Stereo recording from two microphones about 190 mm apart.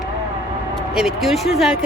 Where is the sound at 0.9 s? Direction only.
Centre (ahead or behind).